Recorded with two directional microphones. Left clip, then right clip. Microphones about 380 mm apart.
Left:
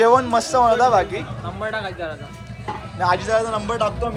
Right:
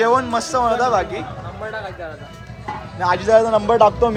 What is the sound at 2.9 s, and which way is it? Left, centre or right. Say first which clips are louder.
Speech: right 4 dB; centre.